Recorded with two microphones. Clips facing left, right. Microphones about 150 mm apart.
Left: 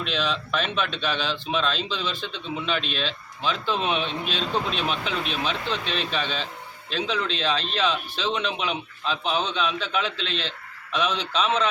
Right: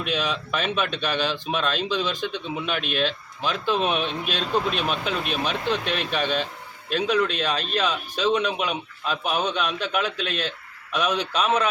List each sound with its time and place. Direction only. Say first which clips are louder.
0.0 s speech: right 1 dB; 15° right (ahead or behind)
2.9 s speech: right 5 dB; 50° right (ahead or behind)
3.4 s speech: right 2 dB; 10° right (ahead or behind)